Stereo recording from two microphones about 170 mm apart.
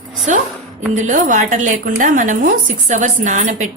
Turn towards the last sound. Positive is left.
turn(degrees=-45)  # may be behind; listen again after turning